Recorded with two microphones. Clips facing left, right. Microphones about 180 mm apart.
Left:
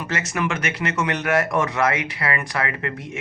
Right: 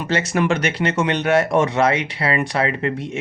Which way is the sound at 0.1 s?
30° right (ahead or behind).